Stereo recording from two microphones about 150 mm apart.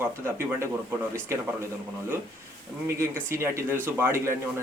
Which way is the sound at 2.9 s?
15° right (ahead or behind).